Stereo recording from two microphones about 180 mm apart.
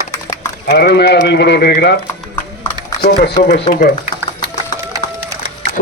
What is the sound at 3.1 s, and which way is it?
A man's voice, 60° left (ahead or behind).